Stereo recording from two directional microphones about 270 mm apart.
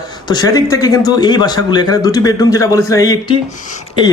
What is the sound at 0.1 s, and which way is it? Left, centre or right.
A man's voice, centre.